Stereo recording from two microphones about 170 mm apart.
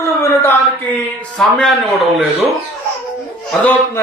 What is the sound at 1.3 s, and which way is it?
Speech, centre (ahead or behind).